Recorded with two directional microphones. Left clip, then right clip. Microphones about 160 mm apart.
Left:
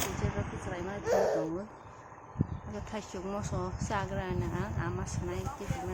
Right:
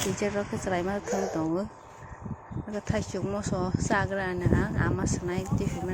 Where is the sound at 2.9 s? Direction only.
30° right (ahead or behind).